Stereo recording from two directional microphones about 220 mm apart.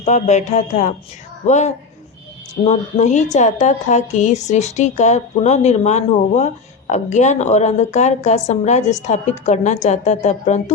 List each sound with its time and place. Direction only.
0.0 s a woman's voice: 30° left (ahead or behind)